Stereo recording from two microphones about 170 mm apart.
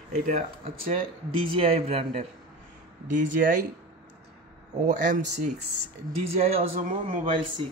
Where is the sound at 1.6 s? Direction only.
35° right (ahead or behind).